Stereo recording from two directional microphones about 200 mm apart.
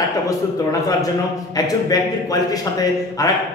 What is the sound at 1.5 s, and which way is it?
A man's voice, 20° left (ahead or behind).